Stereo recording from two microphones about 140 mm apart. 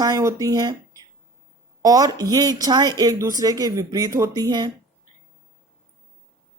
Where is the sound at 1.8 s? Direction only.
25° right (ahead or behind).